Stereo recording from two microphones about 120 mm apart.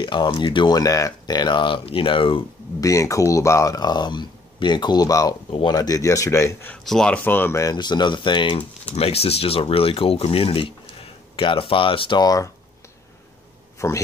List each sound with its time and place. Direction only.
0.0 s speech: 40° left (ahead or behind)
2.8 s speech: 25° left (ahead or behind)
6.7 s speech: 5° left (ahead or behind)
7.2 s speech: 15° left (ahead or behind)
7.7 s speech: 35° left (ahead or behind)
8.9 s speech: 55° left (ahead or behind)
12.2 s speech: 30° left (ahead or behind)
13.7 s a man's voice: 25° left (ahead or behind)